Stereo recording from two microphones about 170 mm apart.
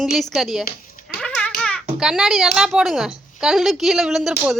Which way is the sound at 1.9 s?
5° right (ahead or behind).